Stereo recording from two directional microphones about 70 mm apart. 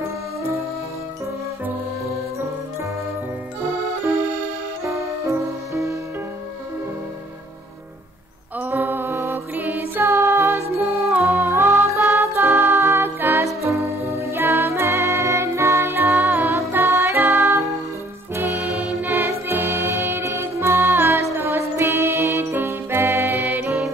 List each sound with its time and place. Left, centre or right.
4.8 s music: right
8.5 s music: right
10.0 s music: right
18.3 s music: right
18.6 s music: centre
19.0 s music: right
22.4 s music: right